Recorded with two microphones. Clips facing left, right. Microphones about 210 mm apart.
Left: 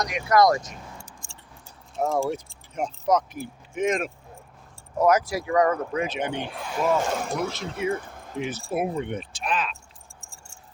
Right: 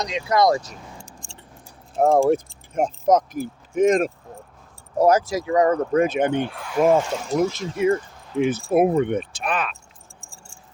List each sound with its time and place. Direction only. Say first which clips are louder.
0.0 s speech: even; 25° right (ahead or behind)
2.0 s speech: right 8 dB; 55° right (ahead or behind); by 5.8 s 25° right (ahead or behind)
5.9 s speech: right 8 dB; 50° right (ahead or behind)
6.5 s speech: left 1 dB; 20° left (ahead or behind)
7.0 s speech: right 5 dB; 55° left (ahead or behind)
7.9 s a sound: right 3 dB; 55° left (ahead or behind)
8.4 s speech: right 9 dB; 55° right (ahead or behind)